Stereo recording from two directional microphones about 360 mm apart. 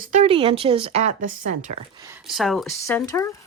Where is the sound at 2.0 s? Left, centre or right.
Centre.